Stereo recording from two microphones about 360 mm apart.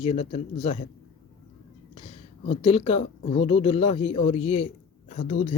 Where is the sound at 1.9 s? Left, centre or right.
Centre.